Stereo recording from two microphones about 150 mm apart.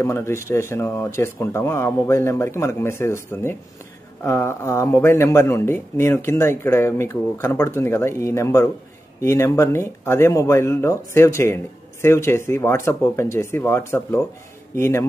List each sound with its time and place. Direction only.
0.0 s speech: 15° left (ahead or behind)